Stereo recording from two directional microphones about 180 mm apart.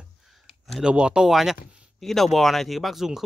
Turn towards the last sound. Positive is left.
turn(degrees=0)  # may be behind; listen again after turning